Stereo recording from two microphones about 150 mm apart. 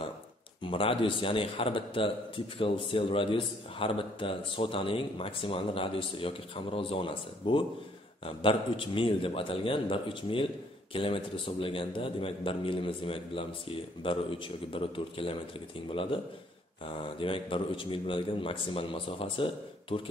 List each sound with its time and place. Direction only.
0.6 s a man's voice: 35° left (ahead or behind)
17.2 s a man's voice: 35° left (ahead or behind)